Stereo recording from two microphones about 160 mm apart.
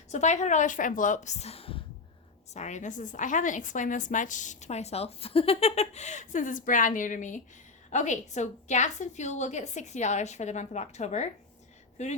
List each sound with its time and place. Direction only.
0.1 s a woman's voice: 45° left (ahead or behind)